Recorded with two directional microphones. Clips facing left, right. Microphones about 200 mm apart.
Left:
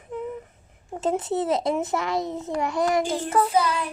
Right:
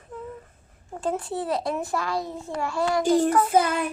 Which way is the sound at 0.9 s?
20° left (ahead or behind).